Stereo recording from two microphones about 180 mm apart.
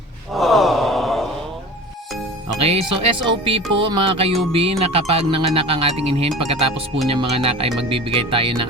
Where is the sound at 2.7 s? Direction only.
30° right (ahead or behind).